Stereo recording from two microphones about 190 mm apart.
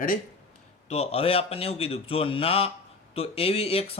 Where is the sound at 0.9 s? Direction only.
30° left (ahead or behind).